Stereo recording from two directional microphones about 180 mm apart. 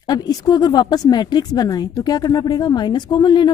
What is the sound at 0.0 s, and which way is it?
Speech, 20° left (ahead or behind).